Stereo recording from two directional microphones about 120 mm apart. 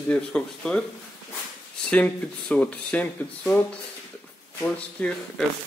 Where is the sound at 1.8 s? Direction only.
10° left (ahead or behind).